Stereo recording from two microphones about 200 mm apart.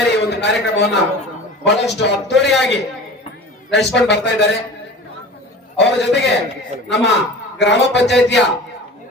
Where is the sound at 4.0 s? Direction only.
60° left (ahead or behind).